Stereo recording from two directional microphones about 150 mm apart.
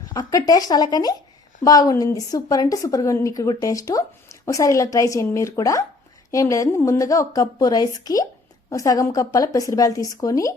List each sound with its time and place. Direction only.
0.0 s a woman's voice: 25° left (ahead or behind)